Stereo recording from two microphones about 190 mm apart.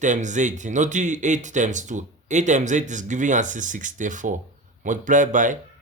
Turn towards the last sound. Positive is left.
turn(degrees=-45)  # may be behind; listen again after turning